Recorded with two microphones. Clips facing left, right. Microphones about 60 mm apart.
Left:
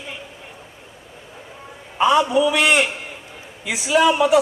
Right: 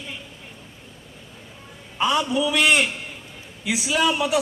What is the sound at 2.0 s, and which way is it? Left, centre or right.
A man's voice, centre.